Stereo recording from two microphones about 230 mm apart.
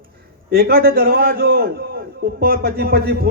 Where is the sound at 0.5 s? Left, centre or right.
Right.